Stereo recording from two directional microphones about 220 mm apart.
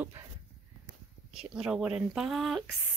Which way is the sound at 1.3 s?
5° right (ahead or behind).